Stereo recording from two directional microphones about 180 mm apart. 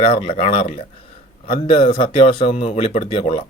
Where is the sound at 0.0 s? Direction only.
30° left (ahead or behind).